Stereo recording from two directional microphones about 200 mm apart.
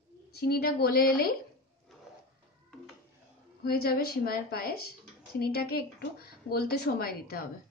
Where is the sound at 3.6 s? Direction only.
50° left (ahead or behind).